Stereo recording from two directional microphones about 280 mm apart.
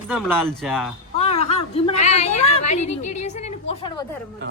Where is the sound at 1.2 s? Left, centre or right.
Left.